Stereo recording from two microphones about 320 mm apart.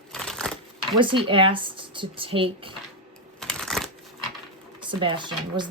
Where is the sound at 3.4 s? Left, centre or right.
Centre.